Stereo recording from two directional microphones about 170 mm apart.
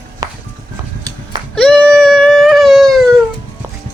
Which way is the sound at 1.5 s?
5° left (ahead or behind).